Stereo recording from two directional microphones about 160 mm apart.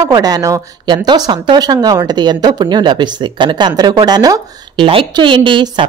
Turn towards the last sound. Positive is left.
turn(degrees=-30)  # may be behind; listen again after turning